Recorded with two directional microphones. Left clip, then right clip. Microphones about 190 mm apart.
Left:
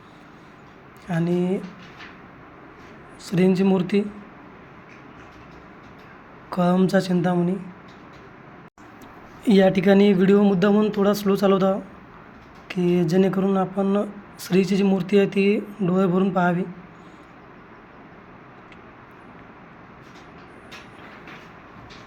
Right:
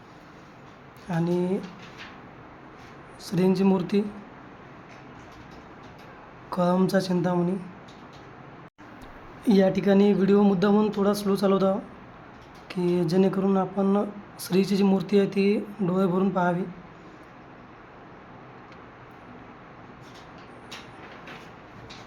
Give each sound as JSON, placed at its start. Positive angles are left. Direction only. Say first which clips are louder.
{"t": 1.0, "sound": "speech", "louder": "left 3 dB", "side_deg": 0}
{"t": 3.2, "sound": "speech", "louder": "left 3 dB", "side_deg": 0}
{"t": 6.5, "sound": "speech", "louder": "left 3 dB", "side_deg": 0}
{"t": 9.4, "sound": "speech", "louder": "left 4 dB", "side_deg": 5}